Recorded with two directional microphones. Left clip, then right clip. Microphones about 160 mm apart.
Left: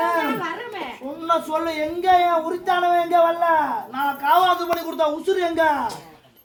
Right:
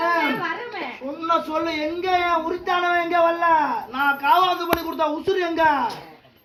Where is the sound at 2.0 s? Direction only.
40° left (ahead or behind).